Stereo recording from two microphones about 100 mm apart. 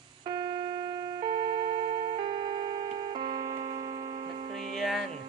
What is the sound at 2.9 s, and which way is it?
Tick-tock, 50° right (ahead or behind).